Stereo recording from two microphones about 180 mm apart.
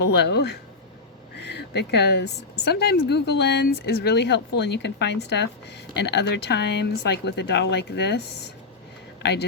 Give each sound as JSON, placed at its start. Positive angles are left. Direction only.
{"t": 0.0, "sound": "a woman's voice", "side_deg": 70}
{"t": 9.2, "sound": "a woman's voice", "side_deg": 70}